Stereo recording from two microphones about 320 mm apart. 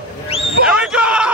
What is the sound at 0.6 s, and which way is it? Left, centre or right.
Basketball bounce, centre.